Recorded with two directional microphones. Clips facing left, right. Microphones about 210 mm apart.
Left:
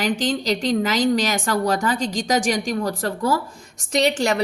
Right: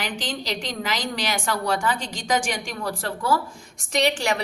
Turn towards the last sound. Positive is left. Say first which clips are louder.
# left 3 dB
turn(degrees=40)  # may be behind; listen again after turning